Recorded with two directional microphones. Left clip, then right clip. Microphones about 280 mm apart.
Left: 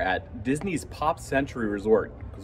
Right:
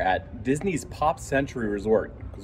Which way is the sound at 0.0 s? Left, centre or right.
Centre.